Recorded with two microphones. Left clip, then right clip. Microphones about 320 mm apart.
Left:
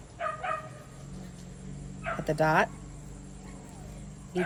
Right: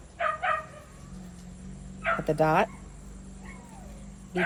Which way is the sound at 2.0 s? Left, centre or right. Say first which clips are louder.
Right 3 dB; right.